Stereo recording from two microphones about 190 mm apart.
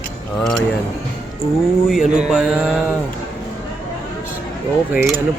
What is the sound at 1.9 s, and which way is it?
Mantra, 5° right (ahead or behind).